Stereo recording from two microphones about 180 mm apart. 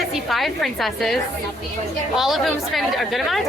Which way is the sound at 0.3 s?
Centre (ahead or behind).